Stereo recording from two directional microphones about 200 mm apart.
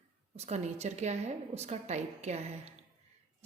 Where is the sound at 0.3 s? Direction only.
35° right (ahead or behind).